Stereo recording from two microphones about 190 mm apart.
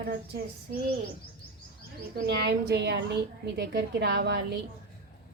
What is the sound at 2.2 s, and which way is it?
A woman's voice, 60° right (ahead or behind).